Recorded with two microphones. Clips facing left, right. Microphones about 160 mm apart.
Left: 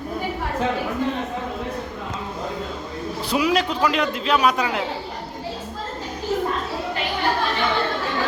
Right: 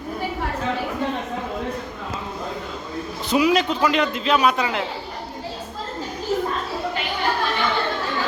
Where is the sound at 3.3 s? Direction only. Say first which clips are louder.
Right 2 dB; centre (ahead or behind).